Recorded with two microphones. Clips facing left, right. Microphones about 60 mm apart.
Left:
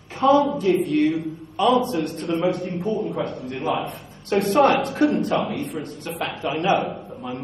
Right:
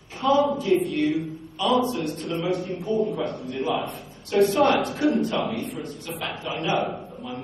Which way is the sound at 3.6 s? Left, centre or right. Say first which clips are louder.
Left 1 dB; left.